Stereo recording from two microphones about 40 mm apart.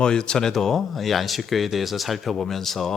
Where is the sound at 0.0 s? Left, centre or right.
Centre.